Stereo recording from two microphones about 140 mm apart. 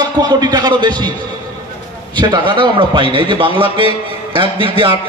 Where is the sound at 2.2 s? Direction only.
35° right (ahead or behind).